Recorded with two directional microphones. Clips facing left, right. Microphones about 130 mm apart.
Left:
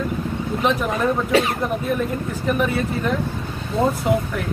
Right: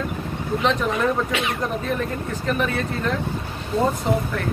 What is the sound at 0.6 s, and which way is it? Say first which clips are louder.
Speech: even; 10° left (ahead or behind).